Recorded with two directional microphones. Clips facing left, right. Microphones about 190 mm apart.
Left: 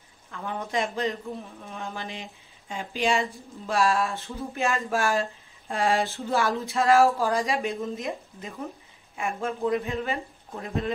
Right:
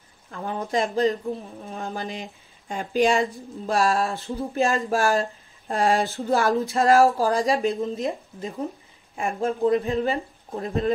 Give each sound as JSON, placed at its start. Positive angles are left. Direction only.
{"t": 0.3, "sound": "speech", "side_deg": -35}